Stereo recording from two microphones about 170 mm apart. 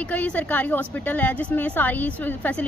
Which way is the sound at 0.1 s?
10° left (ahead or behind).